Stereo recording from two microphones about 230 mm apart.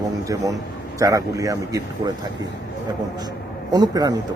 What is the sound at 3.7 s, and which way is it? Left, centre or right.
Speech, centre.